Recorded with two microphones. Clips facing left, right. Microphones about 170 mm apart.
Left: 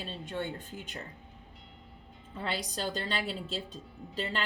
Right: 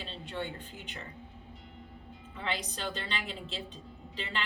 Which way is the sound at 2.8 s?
40° left (ahead or behind).